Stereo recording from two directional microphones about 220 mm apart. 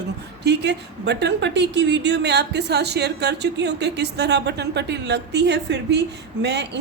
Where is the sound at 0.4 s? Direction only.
50° right (ahead or behind).